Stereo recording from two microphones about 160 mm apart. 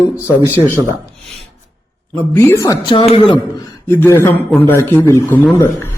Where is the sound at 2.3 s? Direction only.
20° left (ahead or behind).